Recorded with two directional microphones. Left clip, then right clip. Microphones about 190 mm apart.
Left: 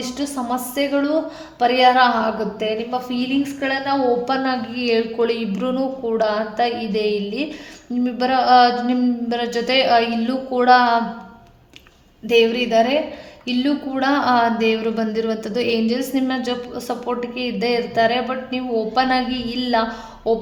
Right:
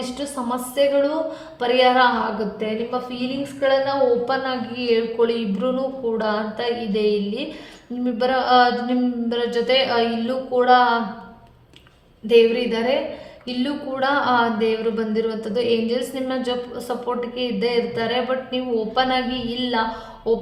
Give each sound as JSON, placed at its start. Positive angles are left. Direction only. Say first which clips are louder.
{"t": 0.0, "sound": "a woman's voice", "louder": "left 2 dB", "side_deg": 40}
{"t": 12.3, "sound": "speech", "louder": "even", "side_deg": 45}